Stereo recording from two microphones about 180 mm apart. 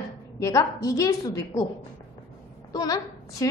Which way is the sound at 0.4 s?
20° left (ahead or behind).